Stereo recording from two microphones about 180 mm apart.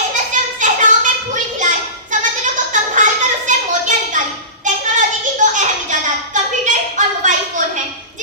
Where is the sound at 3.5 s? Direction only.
45° right (ahead or behind).